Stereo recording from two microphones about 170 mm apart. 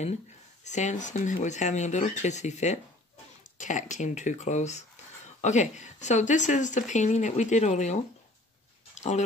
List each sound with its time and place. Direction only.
0.7 s speech: 45° left (ahead or behind)